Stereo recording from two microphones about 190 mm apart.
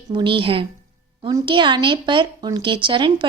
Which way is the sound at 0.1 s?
25° right (ahead or behind).